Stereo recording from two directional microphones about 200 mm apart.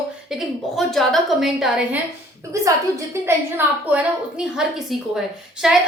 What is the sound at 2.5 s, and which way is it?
Speech, 15° right (ahead or behind).